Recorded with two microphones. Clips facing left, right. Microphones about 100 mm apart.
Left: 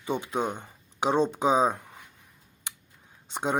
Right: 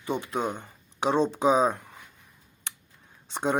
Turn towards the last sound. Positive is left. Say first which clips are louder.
# right 2 dB
turn(degrees=15)  # may be behind; listen again after turning